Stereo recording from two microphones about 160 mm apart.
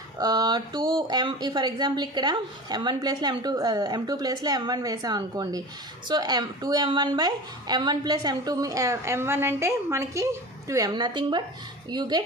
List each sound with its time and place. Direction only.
0.2 s speech: 25° right (ahead or behind)